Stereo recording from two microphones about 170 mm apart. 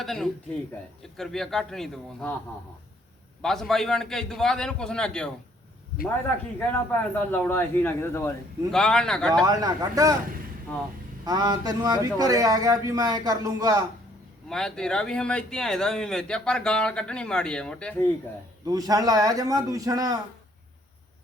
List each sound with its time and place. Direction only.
0.0 s speech: centre (ahead or behind)
3.4 s speech: centre (ahead or behind)
6.6 s speech: 10° left (ahead or behind)
8.7 s speech: 5° left (ahead or behind)
9.5 s a man's voice: 20° right (ahead or behind)
11.3 s a man's voice: 20° right (ahead or behind)
14.5 s speech: 5° left (ahead or behind)
18.6 s a man's voice: 20° right (ahead or behind)